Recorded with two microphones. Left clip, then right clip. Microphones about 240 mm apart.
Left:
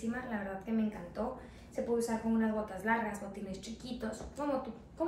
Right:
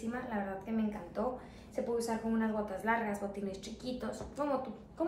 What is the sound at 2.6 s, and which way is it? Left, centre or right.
A woman's voice, centre.